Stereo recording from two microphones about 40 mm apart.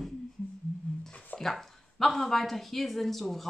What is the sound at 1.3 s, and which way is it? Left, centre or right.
Speech, centre.